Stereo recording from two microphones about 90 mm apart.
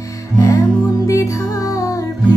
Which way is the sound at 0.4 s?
40° left (ahead or behind).